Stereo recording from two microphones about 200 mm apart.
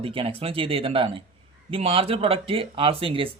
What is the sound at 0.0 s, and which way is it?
Speech, 25° right (ahead or behind).